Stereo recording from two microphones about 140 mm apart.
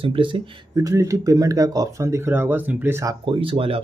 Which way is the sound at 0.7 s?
25° right (ahead or behind).